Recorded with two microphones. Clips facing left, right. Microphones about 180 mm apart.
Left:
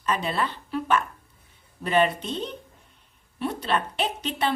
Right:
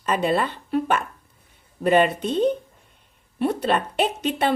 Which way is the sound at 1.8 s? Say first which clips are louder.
Right 4 dB; 55° right (ahead or behind).